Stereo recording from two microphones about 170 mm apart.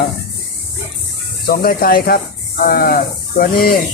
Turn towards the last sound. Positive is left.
turn(degrees=55)  # may be behind; listen again after turning